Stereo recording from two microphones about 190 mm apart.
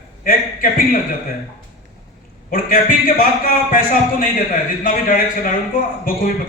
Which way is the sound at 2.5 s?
45° left (ahead or behind).